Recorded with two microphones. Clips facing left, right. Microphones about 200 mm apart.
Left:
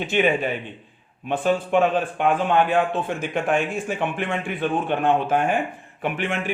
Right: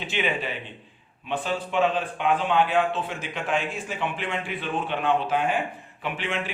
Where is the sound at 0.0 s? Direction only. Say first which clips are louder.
Left 7 dB; 50° left (ahead or behind).